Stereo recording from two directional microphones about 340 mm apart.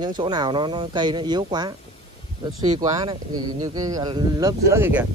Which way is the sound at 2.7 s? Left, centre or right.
Centre.